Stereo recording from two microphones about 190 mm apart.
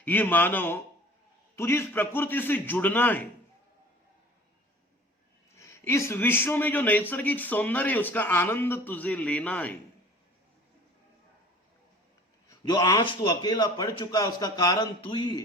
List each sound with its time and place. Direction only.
0.0 s a man's voice: 10° left (ahead or behind)
5.5 s a man's voice: 15° left (ahead or behind)
12.5 s a man's voice: 20° left (ahead or behind)